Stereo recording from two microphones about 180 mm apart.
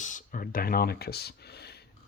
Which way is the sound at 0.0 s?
45° left (ahead or behind).